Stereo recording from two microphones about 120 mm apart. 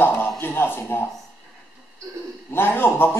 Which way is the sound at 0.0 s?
15° left (ahead or behind).